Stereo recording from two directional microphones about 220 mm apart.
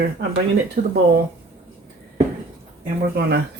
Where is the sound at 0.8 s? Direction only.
40° right (ahead or behind).